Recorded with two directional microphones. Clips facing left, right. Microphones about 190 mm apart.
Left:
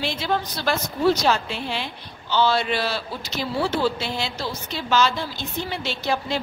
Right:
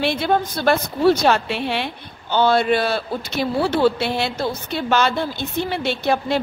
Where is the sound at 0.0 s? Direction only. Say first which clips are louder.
Right 6 dB; 60° right (ahead or behind).